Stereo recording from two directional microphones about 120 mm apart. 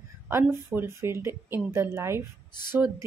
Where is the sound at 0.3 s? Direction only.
20° right (ahead or behind).